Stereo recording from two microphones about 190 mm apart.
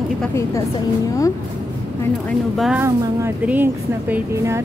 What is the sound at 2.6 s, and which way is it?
A woman's voice, 5° right (ahead or behind).